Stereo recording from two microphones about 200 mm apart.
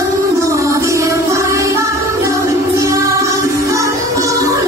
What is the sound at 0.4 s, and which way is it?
Music, 15° right (ahead or behind).